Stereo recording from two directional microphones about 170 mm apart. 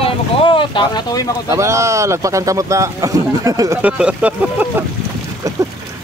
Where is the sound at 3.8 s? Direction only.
5° right (ahead or behind).